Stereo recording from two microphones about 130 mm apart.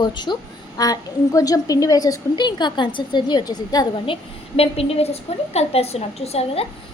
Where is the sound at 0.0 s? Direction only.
35° left (ahead or behind).